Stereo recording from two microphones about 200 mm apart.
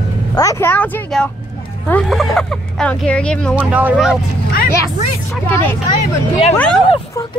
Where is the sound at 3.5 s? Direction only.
5° right (ahead or behind).